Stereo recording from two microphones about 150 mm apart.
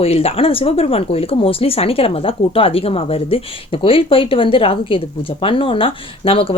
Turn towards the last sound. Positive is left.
turn(degrees=35)  # may be behind; listen again after turning